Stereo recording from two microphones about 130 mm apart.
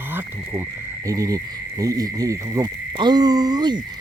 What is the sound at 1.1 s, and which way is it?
Insect, 25° right (ahead or behind).